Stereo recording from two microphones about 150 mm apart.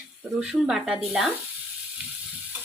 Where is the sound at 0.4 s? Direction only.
5° right (ahead or behind).